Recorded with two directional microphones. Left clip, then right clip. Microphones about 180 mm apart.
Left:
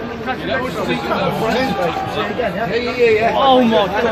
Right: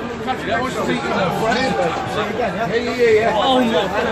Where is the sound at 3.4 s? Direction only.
30° left (ahead or behind).